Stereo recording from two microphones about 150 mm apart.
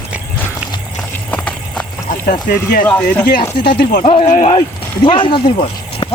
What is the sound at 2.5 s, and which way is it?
Speech, 70° left (ahead or behind).